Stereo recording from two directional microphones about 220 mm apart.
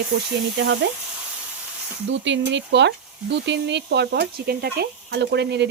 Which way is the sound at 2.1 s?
55° right (ahead or behind).